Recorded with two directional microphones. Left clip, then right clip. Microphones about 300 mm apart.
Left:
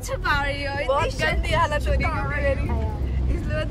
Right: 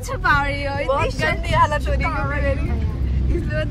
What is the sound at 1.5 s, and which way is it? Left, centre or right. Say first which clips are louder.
Speech: right 7 dB; centre.